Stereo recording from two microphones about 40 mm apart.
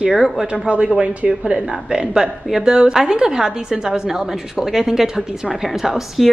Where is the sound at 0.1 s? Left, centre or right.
Centre.